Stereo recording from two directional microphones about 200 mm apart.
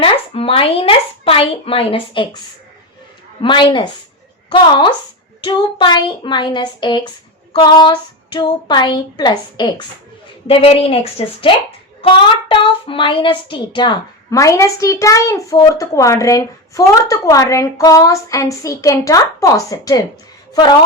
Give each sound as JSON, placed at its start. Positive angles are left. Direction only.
{"t": 0.0, "sound": "a woman's voice", "side_deg": 30}
{"t": 3.4, "sound": "a woman's voice", "side_deg": 25}
{"t": 5.8, "sound": "a woman's voice", "side_deg": 25}